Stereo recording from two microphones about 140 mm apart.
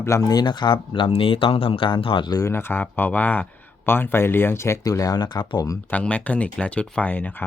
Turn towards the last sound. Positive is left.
turn(degrees=10)  # may be behind; listen again after turning